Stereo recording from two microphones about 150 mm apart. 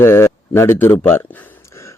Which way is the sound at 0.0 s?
15° left (ahead or behind).